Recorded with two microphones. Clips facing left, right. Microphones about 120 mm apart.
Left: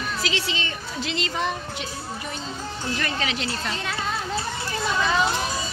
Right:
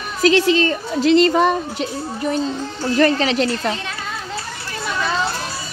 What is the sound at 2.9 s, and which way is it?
Speech, 40° right (ahead or behind).